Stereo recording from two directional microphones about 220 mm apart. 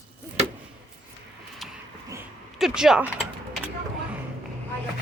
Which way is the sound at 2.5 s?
Centre (ahead or behind).